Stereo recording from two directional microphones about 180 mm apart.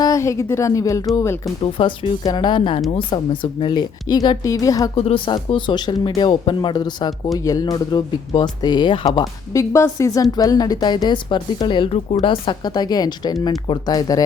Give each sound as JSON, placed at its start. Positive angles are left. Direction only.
{"t": 0.0, "sound": "a woman's voice", "side_deg": 20}
{"t": 4.9, "sound": "speech", "side_deg": 30}